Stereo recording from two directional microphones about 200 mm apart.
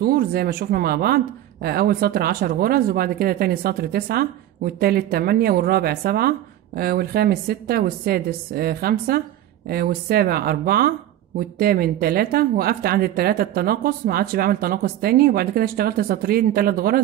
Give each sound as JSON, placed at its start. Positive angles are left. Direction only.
{"t": 0.0, "sound": "speech", "side_deg": -50}